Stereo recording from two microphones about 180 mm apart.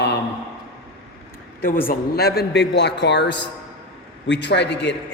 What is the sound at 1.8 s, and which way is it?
A man's voice, 55° left (ahead or behind).